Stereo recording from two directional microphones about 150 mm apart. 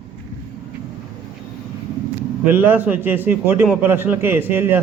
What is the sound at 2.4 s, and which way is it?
A man's voice, 15° right (ahead or behind).